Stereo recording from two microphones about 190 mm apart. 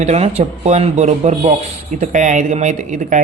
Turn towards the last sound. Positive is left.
turn(degrees=-40)  # may be behind; listen again after turning